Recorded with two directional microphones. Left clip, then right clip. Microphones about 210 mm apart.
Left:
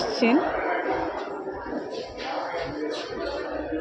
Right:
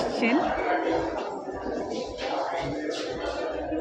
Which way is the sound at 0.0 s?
20° left (ahead or behind).